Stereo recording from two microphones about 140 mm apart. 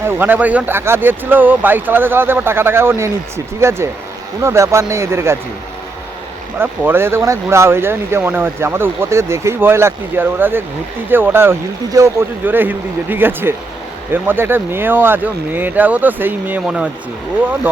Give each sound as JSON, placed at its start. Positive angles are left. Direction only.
{"t": 0.0, "sound": "speech", "side_deg": -15}
{"t": 6.6, "sound": "speech", "side_deg": -15}